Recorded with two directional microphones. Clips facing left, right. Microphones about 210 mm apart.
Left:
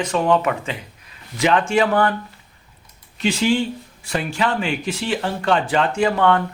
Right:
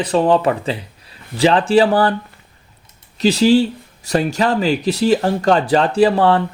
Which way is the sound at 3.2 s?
35° right (ahead or behind).